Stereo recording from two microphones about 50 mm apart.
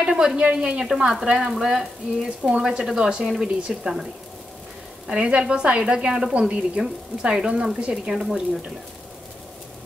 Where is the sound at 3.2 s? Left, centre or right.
Centre.